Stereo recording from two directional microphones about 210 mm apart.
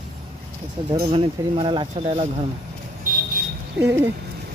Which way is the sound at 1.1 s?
25° right (ahead or behind).